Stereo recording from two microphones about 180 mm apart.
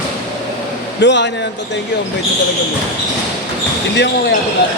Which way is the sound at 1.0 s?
80° left.